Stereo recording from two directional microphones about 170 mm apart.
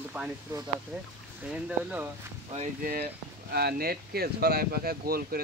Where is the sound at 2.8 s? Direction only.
65° right (ahead or behind).